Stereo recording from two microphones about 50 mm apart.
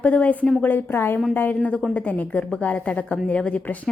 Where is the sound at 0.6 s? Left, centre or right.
Left.